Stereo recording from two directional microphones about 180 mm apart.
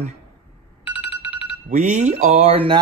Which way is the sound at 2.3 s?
30° right (ahead or behind).